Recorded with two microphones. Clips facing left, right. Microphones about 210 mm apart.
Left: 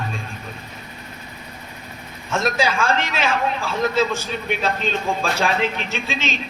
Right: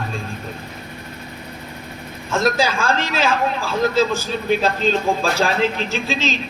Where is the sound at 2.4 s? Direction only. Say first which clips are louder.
Right 2 dB; 35° right (ahead or behind).